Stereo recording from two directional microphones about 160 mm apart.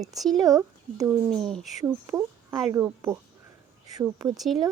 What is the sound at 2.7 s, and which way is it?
A woman's voice, 20° right (ahead or behind).